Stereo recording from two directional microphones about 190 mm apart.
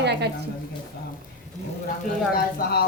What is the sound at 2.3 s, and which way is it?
Speech, 55° left (ahead or behind).